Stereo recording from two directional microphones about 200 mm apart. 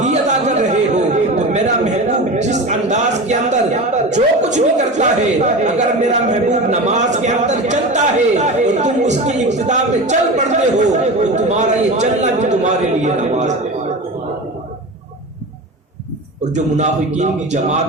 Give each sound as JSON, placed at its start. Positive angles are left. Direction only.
{"t": 0.0, "sound": "chatter", "side_deg": -35}
{"t": 16.4, "sound": "a man's voice", "side_deg": -35}